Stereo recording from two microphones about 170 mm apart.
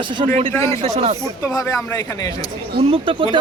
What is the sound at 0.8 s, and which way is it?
Speech, 35° right (ahead or behind).